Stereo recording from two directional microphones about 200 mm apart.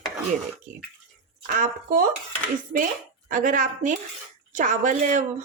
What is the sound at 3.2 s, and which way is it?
Speech, 40° right (ahead or behind).